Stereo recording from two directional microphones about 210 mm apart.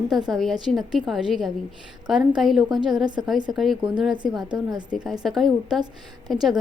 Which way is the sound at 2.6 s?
20° right (ahead or behind).